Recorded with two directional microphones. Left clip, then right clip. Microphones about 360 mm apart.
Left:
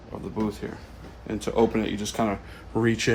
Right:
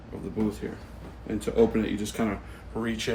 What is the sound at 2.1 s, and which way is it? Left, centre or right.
Speech, left.